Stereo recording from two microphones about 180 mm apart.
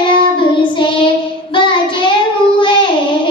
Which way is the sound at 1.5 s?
25° left (ahead or behind).